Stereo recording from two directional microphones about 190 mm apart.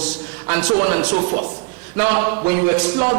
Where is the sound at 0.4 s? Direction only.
15° right (ahead or behind).